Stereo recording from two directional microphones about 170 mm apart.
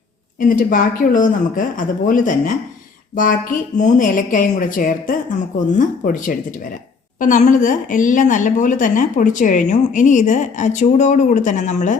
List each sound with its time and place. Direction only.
0.3 s speech: 55° left (ahead or behind)